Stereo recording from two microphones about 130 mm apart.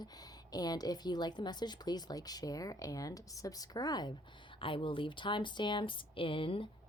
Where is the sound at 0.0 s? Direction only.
30° left (ahead or behind).